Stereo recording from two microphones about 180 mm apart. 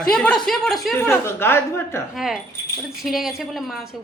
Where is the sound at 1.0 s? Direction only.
15° left (ahead or behind).